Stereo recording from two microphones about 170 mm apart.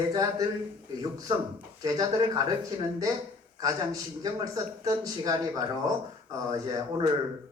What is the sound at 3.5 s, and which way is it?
Speech, 20° right (ahead or behind).